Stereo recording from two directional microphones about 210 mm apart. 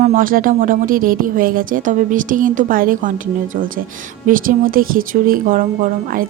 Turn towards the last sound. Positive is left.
turn(degrees=-40)  # may be behind; listen again after turning